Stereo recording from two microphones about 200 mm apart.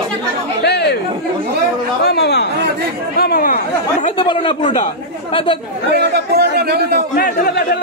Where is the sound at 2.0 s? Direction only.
55° left (ahead or behind); by 4.2 s 40° left (ahead or behind).